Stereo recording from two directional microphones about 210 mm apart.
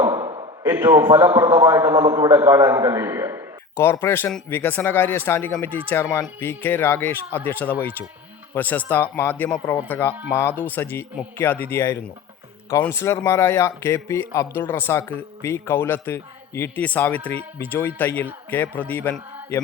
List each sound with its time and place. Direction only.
0.0 s a sound: 20° right (ahead or behind)
0.6 s a man's voice: 10° right (ahead or behind)
3.8 s speech: 10° left (ahead or behind)